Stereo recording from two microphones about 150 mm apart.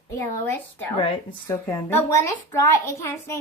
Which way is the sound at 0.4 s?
15° left (ahead or behind).